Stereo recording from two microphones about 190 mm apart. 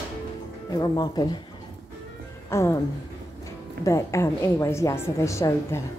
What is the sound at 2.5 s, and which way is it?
Speech, 15° left (ahead or behind).